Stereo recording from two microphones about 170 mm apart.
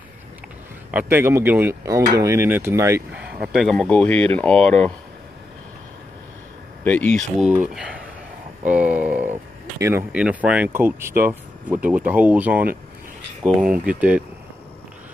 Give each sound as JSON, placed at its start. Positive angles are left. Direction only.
{"t": 0.9, "sound": "speech", "side_deg": -15}
{"t": 3.5, "sound": "speech", "side_deg": 5}
{"t": 6.8, "sound": "speech", "side_deg": 10}